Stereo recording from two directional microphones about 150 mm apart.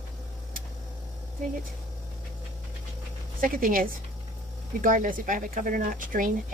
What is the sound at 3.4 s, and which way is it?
Speech, 65° right (ahead or behind).